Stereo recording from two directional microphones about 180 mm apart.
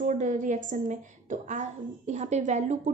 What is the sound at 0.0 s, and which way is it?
A woman's voice, 45° right (ahead or behind).